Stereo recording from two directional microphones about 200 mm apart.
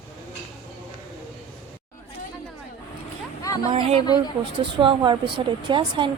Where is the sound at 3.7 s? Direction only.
30° right (ahead or behind).